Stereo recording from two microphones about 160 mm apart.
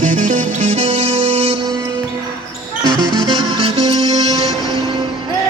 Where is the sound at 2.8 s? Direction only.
25° right (ahead or behind).